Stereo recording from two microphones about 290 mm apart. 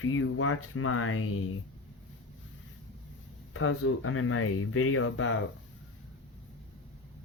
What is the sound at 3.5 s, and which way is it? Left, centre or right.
Speech, left.